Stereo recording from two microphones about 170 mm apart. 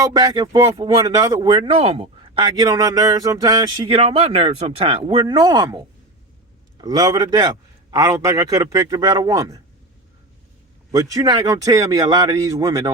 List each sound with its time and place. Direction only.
0.0 s a man's voice: 20° right (ahead or behind)
3.8 s speech: 35° right (ahead or behind)
6.8 s a man's voice: 20° right (ahead or behind)
10.9 s a man's voice: 20° right (ahead or behind)